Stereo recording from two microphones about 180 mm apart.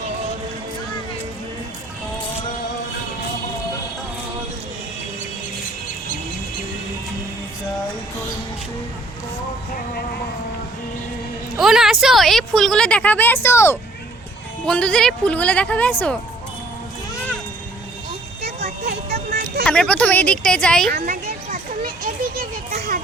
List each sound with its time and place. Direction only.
11.5 s a woman's voice: centre (ahead or behind)
18.4 s a sound: 60° right (ahead or behind)
19.6 s a woman's voice: 5° left (ahead or behind)
20.9 s children playing: 60° right (ahead or behind)